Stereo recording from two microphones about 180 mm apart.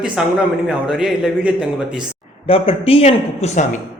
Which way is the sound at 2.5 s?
30° left (ahead or behind).